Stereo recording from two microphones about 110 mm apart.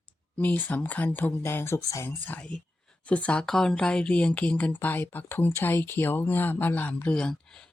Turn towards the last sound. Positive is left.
turn(degrees=5)  # may be behind; listen again after turning